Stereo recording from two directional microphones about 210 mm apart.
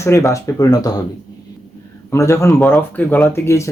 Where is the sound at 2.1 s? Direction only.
15° left (ahead or behind).